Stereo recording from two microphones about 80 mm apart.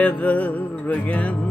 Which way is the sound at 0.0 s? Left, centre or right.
Centre.